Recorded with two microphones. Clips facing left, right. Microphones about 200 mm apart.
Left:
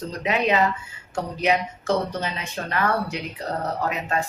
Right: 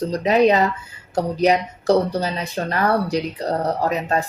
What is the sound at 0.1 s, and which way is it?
Speech, 35° right (ahead or behind).